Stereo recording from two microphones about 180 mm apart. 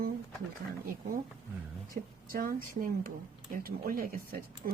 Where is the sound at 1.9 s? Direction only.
50° right (ahead or behind).